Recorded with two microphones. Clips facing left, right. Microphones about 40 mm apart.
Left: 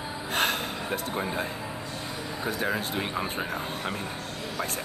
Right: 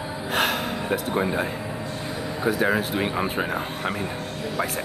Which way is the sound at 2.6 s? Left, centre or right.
Centre.